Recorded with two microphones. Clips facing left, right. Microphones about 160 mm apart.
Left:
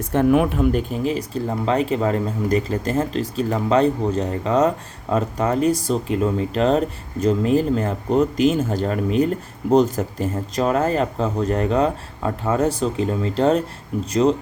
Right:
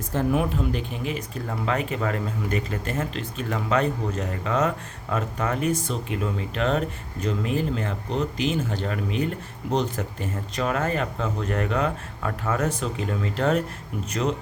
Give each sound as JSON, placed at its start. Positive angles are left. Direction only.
{"t": 0.1, "sound": "speech", "side_deg": 70}